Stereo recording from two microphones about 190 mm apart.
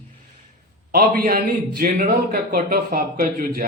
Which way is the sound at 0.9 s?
45° right (ahead or behind).